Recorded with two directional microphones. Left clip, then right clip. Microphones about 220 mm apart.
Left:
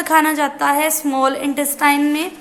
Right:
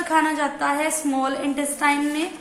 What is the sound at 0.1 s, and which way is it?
A woman's voice, 45° left (ahead or behind).